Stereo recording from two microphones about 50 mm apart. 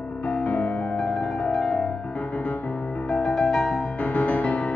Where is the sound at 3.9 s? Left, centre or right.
Left.